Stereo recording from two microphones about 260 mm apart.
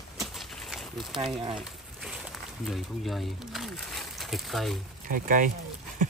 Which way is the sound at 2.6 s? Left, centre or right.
Centre.